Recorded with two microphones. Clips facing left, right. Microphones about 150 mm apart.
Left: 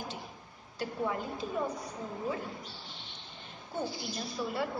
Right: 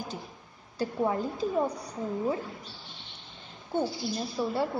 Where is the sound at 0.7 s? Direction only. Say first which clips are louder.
Right 6 dB; 35° right (ahead or behind).